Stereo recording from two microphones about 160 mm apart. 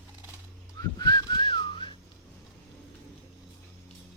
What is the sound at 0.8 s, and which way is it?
Whistling, 25° left (ahead or behind).